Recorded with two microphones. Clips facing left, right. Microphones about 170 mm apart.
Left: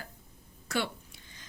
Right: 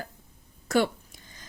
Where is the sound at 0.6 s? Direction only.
45° right (ahead or behind).